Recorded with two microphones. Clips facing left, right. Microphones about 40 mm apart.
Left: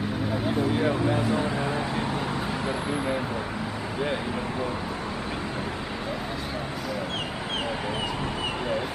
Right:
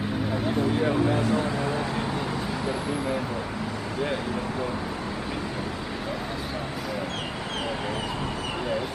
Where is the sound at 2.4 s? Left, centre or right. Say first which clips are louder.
Even; centre.